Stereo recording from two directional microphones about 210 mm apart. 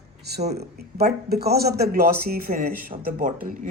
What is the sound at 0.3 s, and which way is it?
Speech, 50° right (ahead or behind).